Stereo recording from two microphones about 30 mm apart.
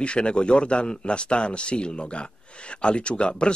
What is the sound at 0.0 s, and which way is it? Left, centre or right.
Speech, left.